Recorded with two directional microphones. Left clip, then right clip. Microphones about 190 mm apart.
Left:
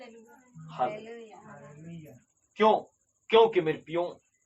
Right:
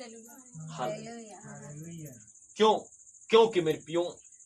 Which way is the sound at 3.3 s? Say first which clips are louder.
Left 1 dB; 35° right (ahead or behind).